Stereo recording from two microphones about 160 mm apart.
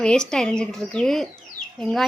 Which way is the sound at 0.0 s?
5° left (ahead or behind).